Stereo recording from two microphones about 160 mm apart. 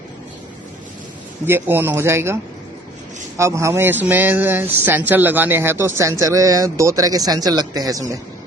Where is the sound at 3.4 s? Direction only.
20° right (ahead or behind).